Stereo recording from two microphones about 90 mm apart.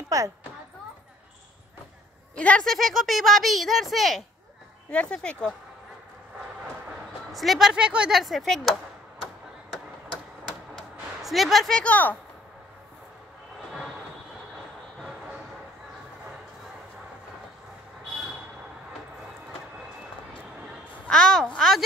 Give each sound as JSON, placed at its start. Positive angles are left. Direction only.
{"t": 0.1, "sound": "speech", "side_deg": -40}
{"t": 2.3, "sound": "speech", "side_deg": 15}
{"t": 4.9, "sound": "speech", "side_deg": 10}
{"t": 7.3, "sound": "speech", "side_deg": 0}
{"t": 11.2, "sound": "speech", "side_deg": 0}
{"t": 21.1, "sound": "a sound", "side_deg": 5}